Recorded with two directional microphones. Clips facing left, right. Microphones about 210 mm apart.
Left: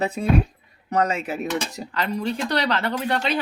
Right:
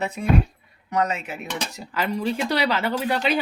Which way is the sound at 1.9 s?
5° right (ahead or behind).